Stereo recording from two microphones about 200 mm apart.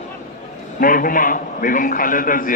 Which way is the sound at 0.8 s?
45° left (ahead or behind).